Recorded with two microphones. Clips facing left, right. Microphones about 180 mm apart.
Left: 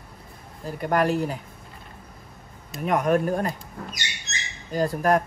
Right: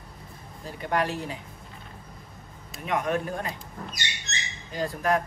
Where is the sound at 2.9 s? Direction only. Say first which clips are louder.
Left 6 dB; 45° left (ahead or behind).